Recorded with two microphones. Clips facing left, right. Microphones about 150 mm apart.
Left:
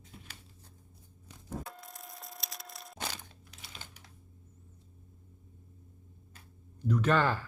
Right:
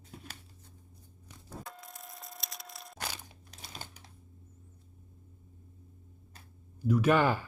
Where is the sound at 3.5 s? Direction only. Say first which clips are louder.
Right 5 dB; 40° right (ahead or behind).